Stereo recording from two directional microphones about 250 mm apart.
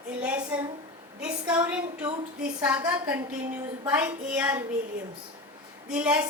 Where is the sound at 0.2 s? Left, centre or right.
Centre.